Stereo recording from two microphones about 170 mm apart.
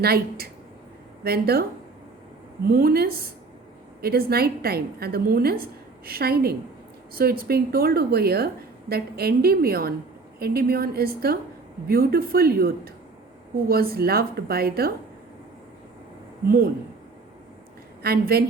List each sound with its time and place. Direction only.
0.0 s a woman's voice: 65° right (ahead or behind)
2.6 s a woman's voice: 65° right (ahead or behind)
16.5 s a woman's voice: 60° right (ahead or behind)
18.0 s a woman's voice: 65° right (ahead or behind)